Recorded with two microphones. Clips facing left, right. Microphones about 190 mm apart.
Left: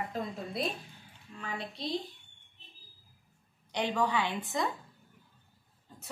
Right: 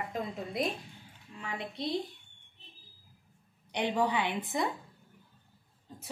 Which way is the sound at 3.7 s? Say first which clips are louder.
Right 1 dB; 20° right (ahead or behind).